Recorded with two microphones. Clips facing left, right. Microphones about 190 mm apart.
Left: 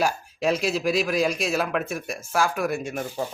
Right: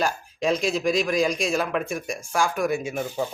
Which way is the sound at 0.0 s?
5° left (ahead or behind).